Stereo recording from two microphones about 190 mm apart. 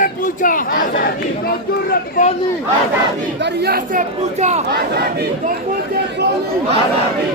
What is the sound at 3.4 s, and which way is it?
Speech, 55° right (ahead or behind).